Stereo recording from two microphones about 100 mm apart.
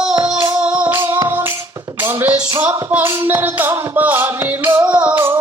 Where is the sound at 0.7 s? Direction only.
10° right (ahead or behind).